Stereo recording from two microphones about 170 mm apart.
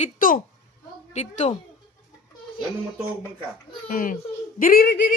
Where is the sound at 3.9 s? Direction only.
55° left (ahead or behind).